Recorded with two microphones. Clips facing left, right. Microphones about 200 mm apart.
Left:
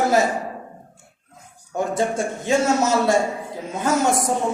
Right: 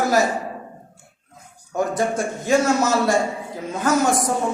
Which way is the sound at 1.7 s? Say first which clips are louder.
Right 1 dB; 25° left (ahead or behind).